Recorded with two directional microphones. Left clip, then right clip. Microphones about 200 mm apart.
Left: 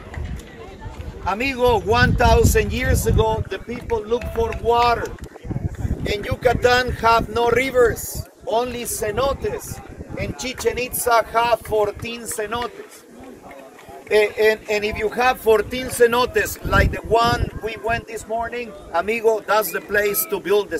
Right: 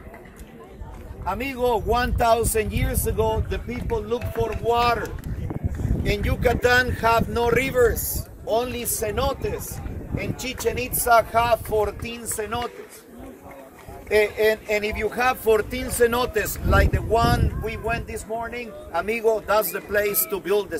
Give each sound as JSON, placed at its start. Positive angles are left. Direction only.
{"t": 1.2, "sound": "speech", "side_deg": -10}
{"t": 3.9, "sound": "speech", "side_deg": -40}
{"t": 6.0, "sound": "speech", "side_deg": -35}
{"t": 11.4, "sound": "speech", "side_deg": -20}
{"t": 14.0, "sound": "speech", "side_deg": -15}